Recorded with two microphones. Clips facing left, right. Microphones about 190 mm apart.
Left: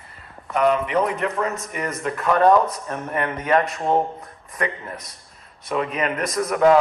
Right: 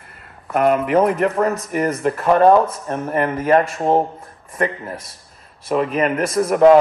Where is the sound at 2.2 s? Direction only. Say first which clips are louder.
Right 3 dB; 30° right (ahead or behind).